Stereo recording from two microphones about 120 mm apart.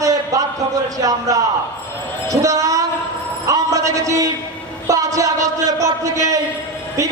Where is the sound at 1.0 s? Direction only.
30° right (ahead or behind).